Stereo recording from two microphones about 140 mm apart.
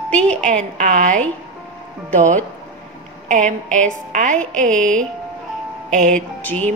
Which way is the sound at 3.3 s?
65° right (ahead or behind).